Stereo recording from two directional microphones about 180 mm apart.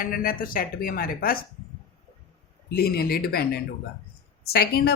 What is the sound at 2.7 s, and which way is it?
A woman's voice, 60° left (ahead or behind).